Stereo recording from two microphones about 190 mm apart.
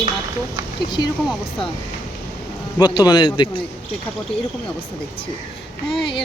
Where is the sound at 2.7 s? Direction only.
25° left (ahead or behind).